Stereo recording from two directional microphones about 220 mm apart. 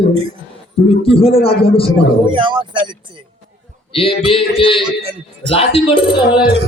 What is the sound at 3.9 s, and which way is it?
Speech, 25° left (ahead or behind).